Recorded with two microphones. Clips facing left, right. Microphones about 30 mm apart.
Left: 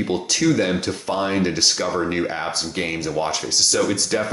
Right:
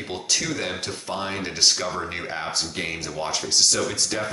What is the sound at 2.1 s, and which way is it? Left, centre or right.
Speech, centre.